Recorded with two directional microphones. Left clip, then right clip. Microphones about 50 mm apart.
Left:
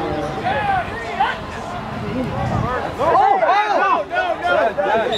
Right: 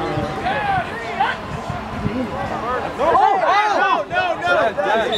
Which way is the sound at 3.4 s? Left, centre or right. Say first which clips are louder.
Even; right.